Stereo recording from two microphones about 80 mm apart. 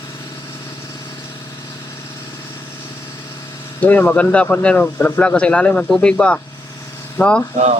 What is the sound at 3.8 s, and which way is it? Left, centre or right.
Speech, centre.